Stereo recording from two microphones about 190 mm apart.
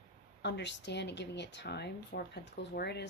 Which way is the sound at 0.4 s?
65° left (ahead or behind).